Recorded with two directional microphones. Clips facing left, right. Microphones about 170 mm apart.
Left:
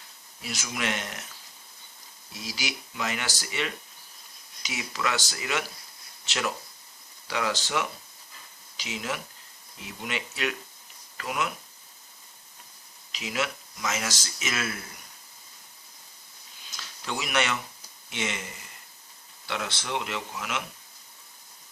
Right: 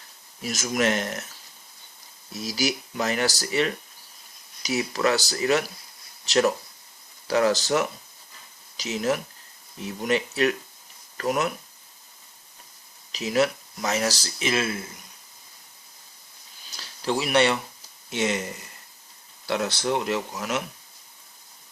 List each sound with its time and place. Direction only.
0.4 s speech: 40° right (ahead or behind)
2.3 s speech: 40° right (ahead or behind)
13.1 s speech: 40° right (ahead or behind)
16.7 s speech: 35° right (ahead or behind)